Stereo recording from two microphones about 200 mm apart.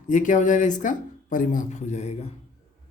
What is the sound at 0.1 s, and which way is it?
Speech, 40° left (ahead or behind).